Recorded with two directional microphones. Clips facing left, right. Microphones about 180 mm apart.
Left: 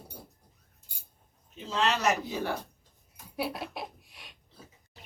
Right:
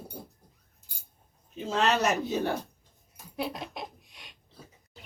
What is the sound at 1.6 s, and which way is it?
Speech, 50° right (ahead or behind).